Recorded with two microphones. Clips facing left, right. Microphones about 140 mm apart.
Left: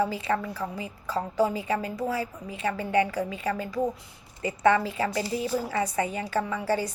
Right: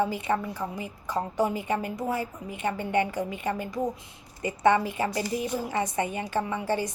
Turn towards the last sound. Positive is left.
turn(degrees=-20)  # may be behind; listen again after turning